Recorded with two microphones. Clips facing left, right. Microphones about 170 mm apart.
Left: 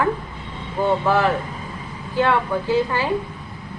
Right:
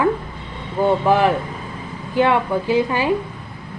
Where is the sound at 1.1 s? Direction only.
15° right (ahead or behind).